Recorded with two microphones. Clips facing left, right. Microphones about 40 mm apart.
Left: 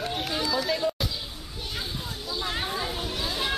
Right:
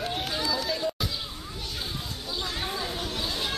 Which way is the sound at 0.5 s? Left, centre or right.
Centre.